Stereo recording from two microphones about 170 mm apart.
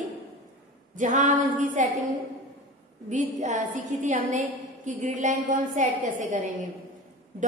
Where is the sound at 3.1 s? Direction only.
45° right (ahead or behind).